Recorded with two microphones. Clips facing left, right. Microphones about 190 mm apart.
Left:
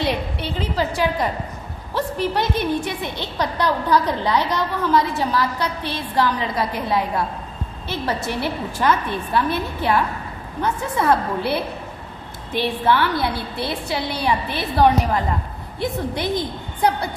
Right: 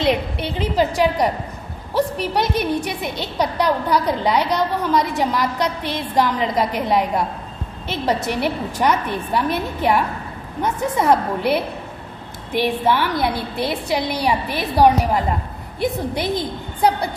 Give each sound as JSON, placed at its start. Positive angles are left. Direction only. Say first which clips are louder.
{"t": 0.0, "sound": "a woman's voice", "louder": "right 4 dB", "side_deg": -15}